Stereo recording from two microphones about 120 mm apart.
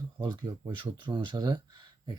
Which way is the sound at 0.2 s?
40° right (ahead or behind).